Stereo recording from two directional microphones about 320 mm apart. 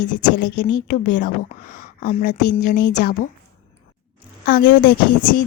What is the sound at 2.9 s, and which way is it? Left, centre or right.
Speech, left.